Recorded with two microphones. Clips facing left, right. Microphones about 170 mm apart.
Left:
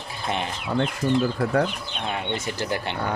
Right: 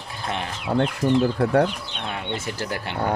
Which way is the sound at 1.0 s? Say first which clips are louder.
Right 2 dB; 60° right (ahead or behind).